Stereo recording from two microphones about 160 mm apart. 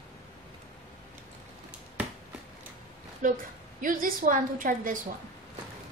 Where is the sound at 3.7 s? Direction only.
60° right (ahead or behind).